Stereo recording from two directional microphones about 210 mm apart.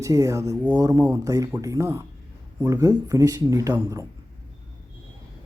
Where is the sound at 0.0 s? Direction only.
15° right (ahead or behind).